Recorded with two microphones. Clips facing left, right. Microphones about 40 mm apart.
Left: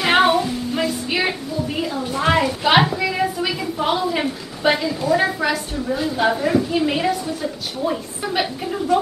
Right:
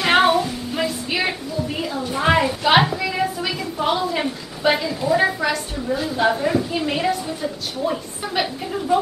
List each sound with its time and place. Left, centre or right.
0.0 s music: centre
2.6 s a woman's voice: centre